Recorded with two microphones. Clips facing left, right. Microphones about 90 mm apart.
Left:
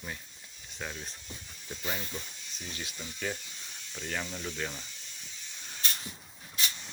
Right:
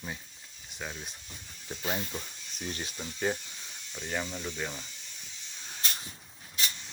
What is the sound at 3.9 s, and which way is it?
Speech, 10° right (ahead or behind).